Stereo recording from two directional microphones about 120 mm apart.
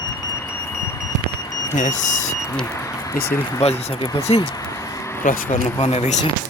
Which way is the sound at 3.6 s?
65° left (ahead or behind).